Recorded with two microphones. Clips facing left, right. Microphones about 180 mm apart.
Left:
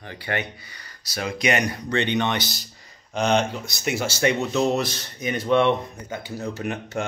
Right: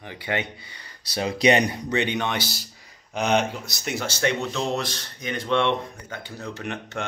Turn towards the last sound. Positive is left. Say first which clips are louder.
# left 4 dB
turn(degrees=5)  # may be behind; listen again after turning